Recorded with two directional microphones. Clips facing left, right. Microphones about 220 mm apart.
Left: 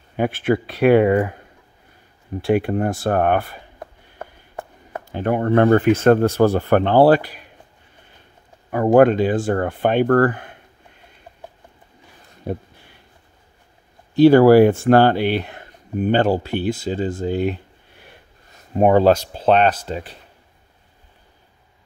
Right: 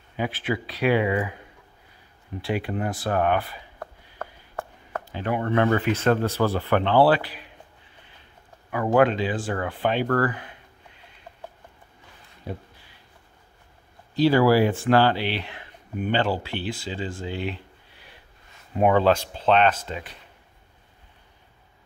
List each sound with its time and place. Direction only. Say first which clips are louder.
0.1 s speech: left 8 dB; 50° left (ahead or behind)
2.4 s speech: left 8 dB; 45° left (ahead or behind)
3.8 s a sound: even; 15° left (ahead or behind)
5.1 s speech: left 7 dB; 50° left (ahead or behind)
8.6 s speech: left 7 dB; 40° left (ahead or behind)
12.5 s speech: left 8 dB; 50° left (ahead or behind)
14.1 s speech: left 9 dB; 55° left (ahead or behind); by 20.2 s 35° left (ahead or behind)